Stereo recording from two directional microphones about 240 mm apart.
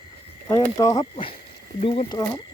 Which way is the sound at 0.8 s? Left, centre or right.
Centre.